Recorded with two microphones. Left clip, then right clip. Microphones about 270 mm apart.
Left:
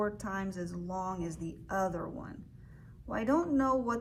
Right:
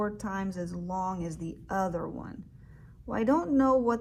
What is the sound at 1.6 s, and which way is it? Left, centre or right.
A woman's voice, right.